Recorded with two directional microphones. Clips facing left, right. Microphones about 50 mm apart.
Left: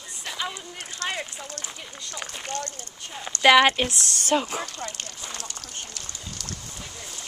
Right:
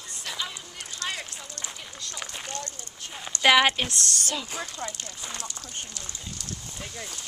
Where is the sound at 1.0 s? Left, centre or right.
Left.